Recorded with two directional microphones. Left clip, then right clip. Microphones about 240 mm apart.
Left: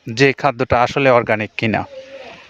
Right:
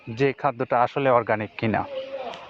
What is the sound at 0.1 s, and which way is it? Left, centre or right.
Speech, left.